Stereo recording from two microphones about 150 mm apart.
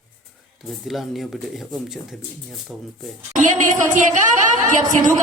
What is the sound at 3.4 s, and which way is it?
A woman's voice, 55° right (ahead or behind).